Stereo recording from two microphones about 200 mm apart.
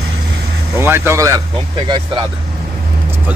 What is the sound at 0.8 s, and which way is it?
Speech, 10° right (ahead or behind).